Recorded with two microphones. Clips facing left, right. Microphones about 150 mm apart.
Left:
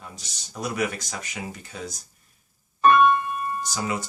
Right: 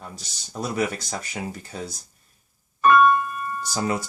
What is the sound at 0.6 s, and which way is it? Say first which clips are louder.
Speech: right 2 dB; 30° right (ahead or behind).